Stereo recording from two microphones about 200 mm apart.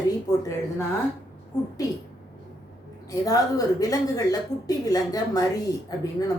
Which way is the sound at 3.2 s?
15° left (ahead or behind).